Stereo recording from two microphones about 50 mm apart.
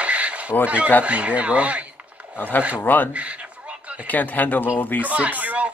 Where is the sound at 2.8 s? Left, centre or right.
Left.